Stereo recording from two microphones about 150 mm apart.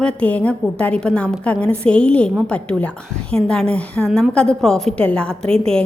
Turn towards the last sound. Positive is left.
turn(degrees=5)  # may be behind; listen again after turning